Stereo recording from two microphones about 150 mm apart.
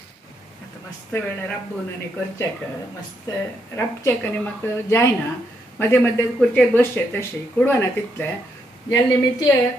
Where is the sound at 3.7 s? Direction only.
15° left (ahead or behind).